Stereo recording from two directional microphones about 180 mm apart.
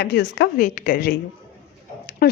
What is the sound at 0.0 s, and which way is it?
Speech, 70° left (ahead or behind).